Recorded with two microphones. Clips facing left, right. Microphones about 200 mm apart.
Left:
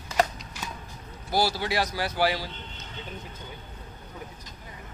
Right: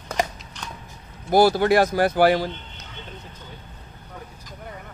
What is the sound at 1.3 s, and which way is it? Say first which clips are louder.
Speech: right 10 dB; 50° right (ahead or behind).